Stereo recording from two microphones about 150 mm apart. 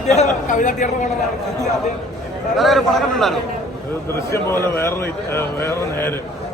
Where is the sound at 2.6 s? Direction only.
Centre (ahead or behind).